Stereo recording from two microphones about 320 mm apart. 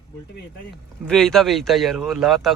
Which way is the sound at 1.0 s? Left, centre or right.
Centre.